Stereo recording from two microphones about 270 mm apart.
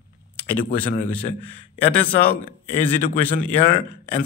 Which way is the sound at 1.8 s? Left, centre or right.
Left.